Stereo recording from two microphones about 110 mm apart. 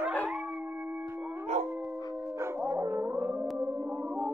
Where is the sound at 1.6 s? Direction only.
90° right.